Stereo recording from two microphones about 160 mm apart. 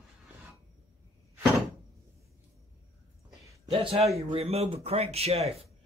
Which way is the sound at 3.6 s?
35° right (ahead or behind).